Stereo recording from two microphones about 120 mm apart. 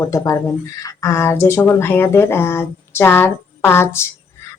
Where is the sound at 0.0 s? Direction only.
25° left (ahead or behind).